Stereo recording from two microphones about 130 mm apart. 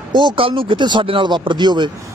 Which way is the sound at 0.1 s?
40° right (ahead or behind).